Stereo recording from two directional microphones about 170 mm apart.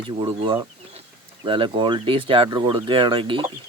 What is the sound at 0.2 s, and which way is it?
Speech, 35° right (ahead or behind).